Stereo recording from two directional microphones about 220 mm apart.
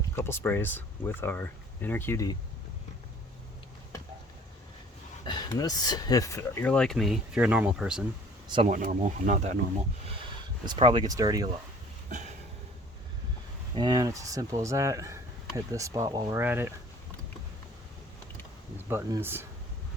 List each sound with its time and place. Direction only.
0.2 s speech: 10° left (ahead or behind)
5.2 s speech: 20° left (ahead or behind); by 8.0 s 5° right (ahead or behind)
8.4 s speech: 20° right (ahead or behind)
8.7 s speech: 35° right (ahead or behind)
10.7 s speech: 20° right (ahead or behind)
12.0 s a sound: 30° right (ahead or behind)
13.7 s speech: 20° right (ahead or behind)
18.9 s speech: 10° right (ahead or behind)